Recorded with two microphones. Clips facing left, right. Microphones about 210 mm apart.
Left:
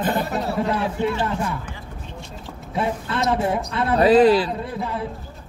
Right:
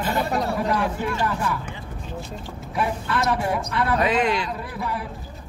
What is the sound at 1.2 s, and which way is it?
Speech, 25° left (ahead or behind).